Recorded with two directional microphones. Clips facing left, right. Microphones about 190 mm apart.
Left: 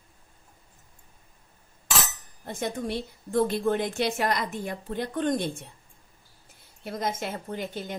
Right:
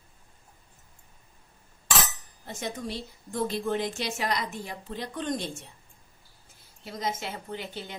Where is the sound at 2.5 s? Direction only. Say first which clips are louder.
Left 4 dB; 55° left (ahead or behind).